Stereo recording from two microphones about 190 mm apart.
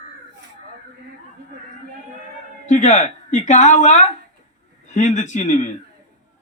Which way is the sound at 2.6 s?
40° left (ahead or behind).